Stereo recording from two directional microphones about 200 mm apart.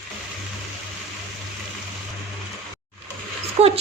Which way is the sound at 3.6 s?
30° right (ahead or behind).